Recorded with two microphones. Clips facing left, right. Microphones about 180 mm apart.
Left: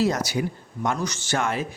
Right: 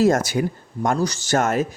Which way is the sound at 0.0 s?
50° right (ahead or behind).